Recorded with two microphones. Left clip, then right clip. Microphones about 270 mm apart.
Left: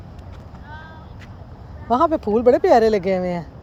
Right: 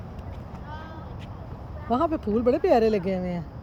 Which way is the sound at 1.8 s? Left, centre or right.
Centre.